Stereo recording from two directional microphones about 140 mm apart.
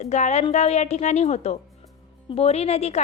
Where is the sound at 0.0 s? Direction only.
55° left (ahead or behind).